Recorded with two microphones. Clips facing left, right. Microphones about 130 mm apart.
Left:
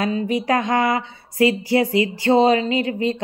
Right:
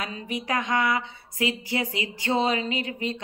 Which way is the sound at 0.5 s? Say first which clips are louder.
Left 5 dB; 35° left (ahead or behind).